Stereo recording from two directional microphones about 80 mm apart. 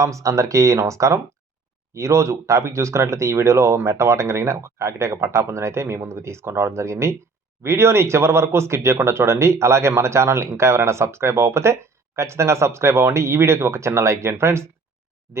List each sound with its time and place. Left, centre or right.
0.0 s speech: right